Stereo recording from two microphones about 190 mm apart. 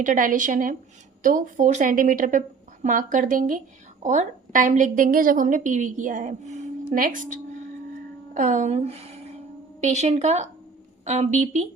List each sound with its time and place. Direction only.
0.0 s a woman's voice: 45° right (ahead or behind)